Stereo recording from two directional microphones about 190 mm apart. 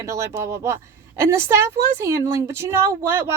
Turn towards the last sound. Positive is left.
turn(degrees=-15)  # may be behind; listen again after turning